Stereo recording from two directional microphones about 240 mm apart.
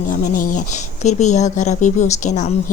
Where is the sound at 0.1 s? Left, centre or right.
Left.